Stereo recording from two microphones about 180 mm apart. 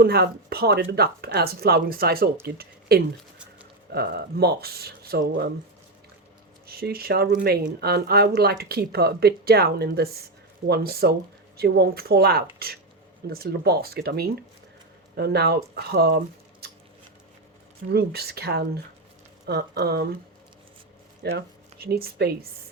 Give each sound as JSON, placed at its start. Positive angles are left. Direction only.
{"t": 0.0, "sound": "speech", "side_deg": -60}
{"t": 6.7, "sound": "speech", "side_deg": -55}
{"t": 17.8, "sound": "speech", "side_deg": -60}
{"t": 21.3, "sound": "speech", "side_deg": -60}